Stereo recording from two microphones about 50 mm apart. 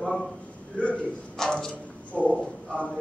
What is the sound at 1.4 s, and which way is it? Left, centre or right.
Speech, centre.